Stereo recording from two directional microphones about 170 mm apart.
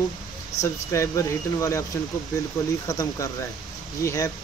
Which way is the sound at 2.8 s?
20° left (ahead or behind).